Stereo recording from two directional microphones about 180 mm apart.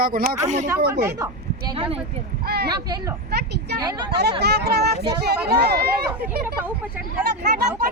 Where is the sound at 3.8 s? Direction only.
25° right (ahead or behind).